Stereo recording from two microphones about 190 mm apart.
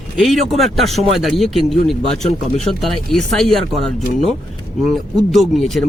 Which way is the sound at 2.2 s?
40° left (ahead or behind).